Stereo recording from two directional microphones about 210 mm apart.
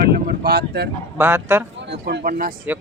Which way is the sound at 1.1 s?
5° right (ahead or behind).